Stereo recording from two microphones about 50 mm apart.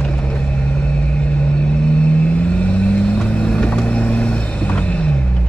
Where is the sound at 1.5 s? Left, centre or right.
Left.